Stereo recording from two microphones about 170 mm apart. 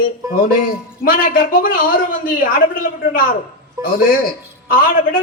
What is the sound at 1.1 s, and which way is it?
A man's voice, 55° left (ahead or behind).